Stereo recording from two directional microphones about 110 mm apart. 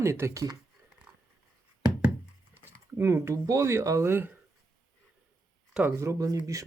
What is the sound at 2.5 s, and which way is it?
Speech, 25° right (ahead or behind).